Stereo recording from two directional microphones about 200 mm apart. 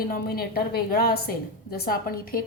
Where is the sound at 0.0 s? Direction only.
50° left (ahead or behind).